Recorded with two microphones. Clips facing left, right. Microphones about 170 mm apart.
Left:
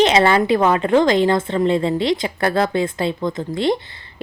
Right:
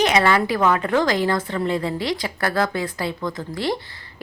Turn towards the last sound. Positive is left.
turn(degrees=20)  # may be behind; listen again after turning